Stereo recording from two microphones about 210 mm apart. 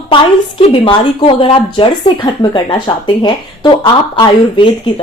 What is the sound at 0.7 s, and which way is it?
Speech, 25° left (ahead or behind).